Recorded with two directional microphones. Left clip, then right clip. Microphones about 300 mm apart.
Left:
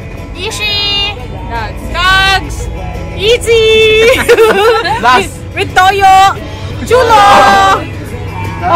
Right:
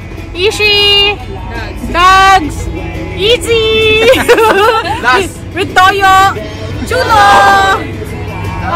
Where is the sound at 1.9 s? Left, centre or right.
Centre.